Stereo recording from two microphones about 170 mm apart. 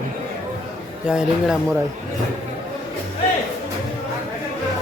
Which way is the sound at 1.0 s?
5° right (ahead or behind).